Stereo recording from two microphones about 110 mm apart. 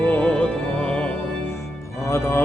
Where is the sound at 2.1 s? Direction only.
20° left (ahead or behind).